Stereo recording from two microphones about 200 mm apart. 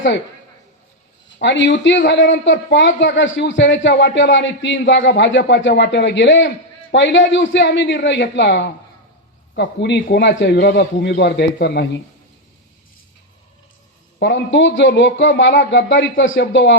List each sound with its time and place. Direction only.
1.4 s speech: 65° left (ahead or behind)
14.2 s speech: 65° left (ahead or behind)